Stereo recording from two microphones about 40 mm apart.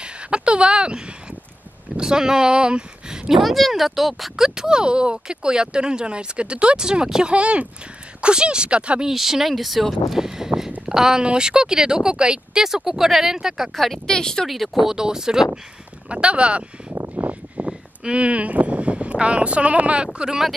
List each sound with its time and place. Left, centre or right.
0.0 s a sound: right
2.0 s speech: centre
3.4 s speech: centre
4.6 s speech: centre
9.0 s speech: centre
10.2 s a sound: centre
10.9 s speech: centre
13.7 s speech: centre
14.0 s speech: centre
14.5 s speech: centre
16.1 s speech: right
17.2 s vehicle: right
17.6 s speech: right